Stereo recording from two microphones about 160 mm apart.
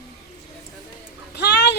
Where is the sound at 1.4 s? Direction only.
90° left.